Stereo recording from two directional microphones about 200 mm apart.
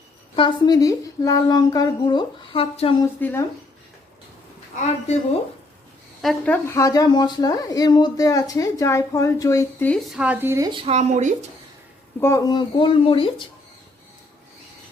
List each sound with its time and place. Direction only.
0.3 s speech: 25° left (ahead or behind)
3.2 s a woman's voice: 10° left (ahead or behind)
6.2 s a woman's voice: 5° left (ahead or behind)
10.2 s a woman's voice: 10° right (ahead or behind); by 11.3 s 35° right (ahead or behind)
12.2 s speech: 15° left (ahead or behind)